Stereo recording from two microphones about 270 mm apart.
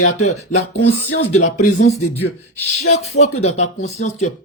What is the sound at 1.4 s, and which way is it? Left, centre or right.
Speech, left.